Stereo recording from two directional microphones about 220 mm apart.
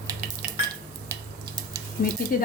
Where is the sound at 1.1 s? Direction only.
15° right (ahead or behind).